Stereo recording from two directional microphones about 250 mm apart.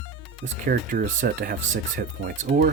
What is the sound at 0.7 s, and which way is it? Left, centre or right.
Speech, right.